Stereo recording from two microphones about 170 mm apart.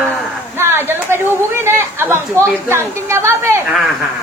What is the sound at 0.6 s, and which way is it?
Chatter, 15° right (ahead or behind).